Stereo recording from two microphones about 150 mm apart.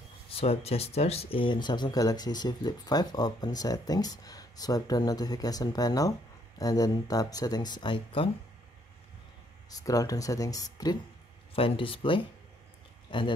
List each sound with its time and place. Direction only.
0.4 s speech: 45° left (ahead or behind)
9.7 s speech: 25° left (ahead or behind)
11.5 s speech: 35° left (ahead or behind)